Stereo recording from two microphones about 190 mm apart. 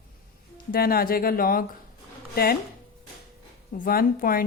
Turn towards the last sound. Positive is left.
turn(degrees=50)  # may be behind; listen again after turning